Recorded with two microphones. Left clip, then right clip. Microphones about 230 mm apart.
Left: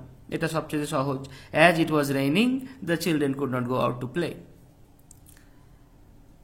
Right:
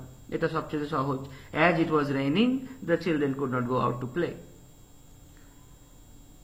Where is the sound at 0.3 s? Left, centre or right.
Left.